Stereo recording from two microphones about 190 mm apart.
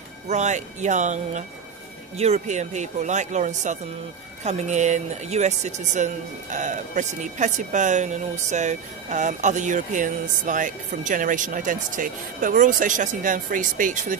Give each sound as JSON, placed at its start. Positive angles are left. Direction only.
{"t": 0.3, "sound": "a woman's voice", "side_deg": -40}